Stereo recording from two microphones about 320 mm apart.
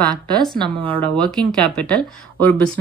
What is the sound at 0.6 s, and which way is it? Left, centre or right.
Speech, centre.